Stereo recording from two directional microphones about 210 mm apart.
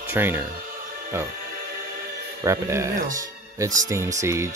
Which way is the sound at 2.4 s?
15° right (ahead or behind).